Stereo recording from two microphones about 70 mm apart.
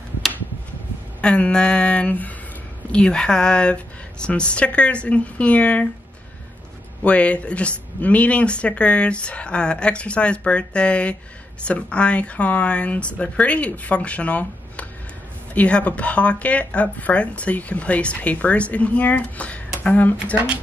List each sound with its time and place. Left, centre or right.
1.2 s speech: centre
7.0 s speech: centre